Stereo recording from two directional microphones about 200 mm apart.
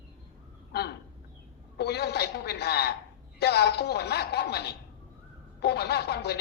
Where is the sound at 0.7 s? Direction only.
55° left (ahead or behind).